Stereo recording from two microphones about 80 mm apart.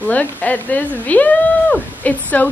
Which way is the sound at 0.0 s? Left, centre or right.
Centre.